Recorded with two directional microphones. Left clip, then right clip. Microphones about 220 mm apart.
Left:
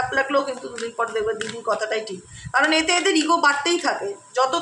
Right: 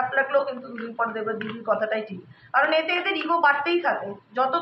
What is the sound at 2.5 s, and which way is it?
A woman's voice, 55° left (ahead or behind).